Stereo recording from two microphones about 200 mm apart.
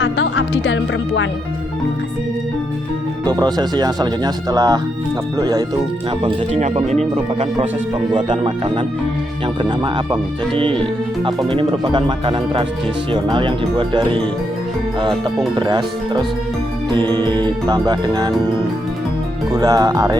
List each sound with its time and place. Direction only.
0.0 s speech: 70° left (ahead or behind)
3.2 s speech: 20° right (ahead or behind)
6.2 s speech: 35° right (ahead or behind)
15.5 s speech: 20° right (ahead or behind)
19.5 s speech: 20° right (ahead or behind)